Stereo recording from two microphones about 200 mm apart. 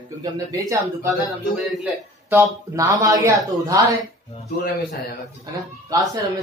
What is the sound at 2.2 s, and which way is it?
Speech, 15° right (ahead or behind).